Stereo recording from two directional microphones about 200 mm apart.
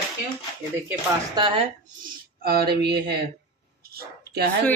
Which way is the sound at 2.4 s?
50° right (ahead or behind).